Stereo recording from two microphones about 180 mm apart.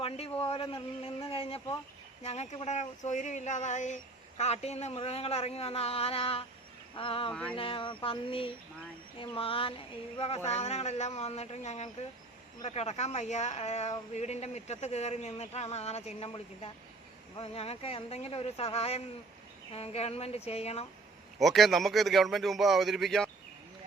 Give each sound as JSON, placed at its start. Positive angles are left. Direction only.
{"t": 0.0, "sound": "speech", "side_deg": 30}
{"t": 6.9, "sound": "a sound", "side_deg": 30}
{"t": 7.3, "sound": "a man's voice", "side_deg": 5}
{"t": 7.5, "sound": "a sound", "side_deg": 30}
{"t": 9.1, "sound": "speech", "side_deg": 30}
{"t": 21.3, "sound": "a man's voice", "side_deg": 0}